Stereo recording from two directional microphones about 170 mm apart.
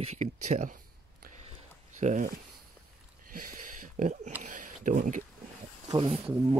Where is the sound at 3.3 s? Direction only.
55° right (ahead or behind).